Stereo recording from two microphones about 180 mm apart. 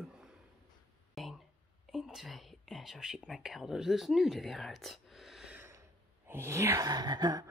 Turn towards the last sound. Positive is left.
turn(degrees=-20)  # may be behind; listen again after turning